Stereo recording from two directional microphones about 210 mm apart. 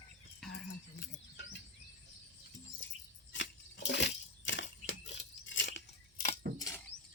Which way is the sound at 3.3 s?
60° left (ahead or behind).